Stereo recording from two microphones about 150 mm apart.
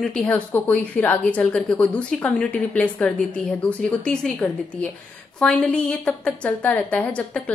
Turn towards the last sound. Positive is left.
turn(degrees=10)  # may be behind; listen again after turning